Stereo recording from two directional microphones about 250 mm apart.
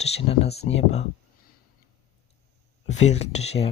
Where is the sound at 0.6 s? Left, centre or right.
Left.